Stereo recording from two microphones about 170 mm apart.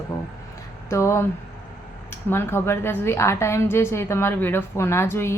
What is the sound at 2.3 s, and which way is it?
A woman's voice, 15° left (ahead or behind).